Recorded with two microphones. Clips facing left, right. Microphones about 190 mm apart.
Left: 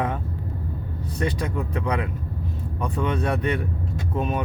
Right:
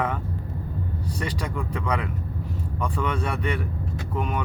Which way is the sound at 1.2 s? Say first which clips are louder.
Left 5 dB; 25° left (ahead or behind).